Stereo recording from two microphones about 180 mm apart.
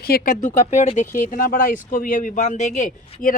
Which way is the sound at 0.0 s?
50° left (ahead or behind).